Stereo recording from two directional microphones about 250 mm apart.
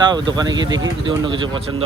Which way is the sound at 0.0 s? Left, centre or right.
Centre.